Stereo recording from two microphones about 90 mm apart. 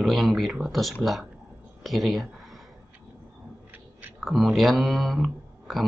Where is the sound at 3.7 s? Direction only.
20° right (ahead or behind).